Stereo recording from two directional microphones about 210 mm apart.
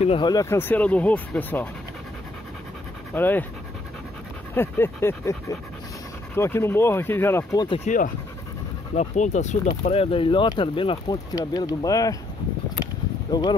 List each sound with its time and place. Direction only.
0.0 s speech: 25° left (ahead or behind); by 1.7 s 10° left (ahead or behind)
3.2 s speech: 10° left (ahead or behind)
4.6 s speech: 10° left (ahead or behind)
8.9 s speech: 35° left (ahead or behind); by 12.2 s 15° left (ahead or behind)
13.3 s speech: 20° left (ahead or behind)